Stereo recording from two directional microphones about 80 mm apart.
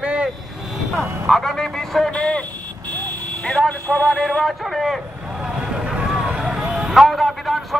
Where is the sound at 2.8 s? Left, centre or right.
Centre.